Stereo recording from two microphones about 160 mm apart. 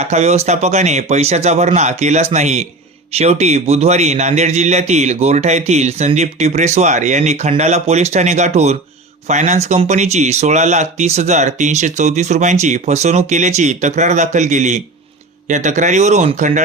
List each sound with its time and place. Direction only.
0.0 s a man's voice: 45° right (ahead or behind)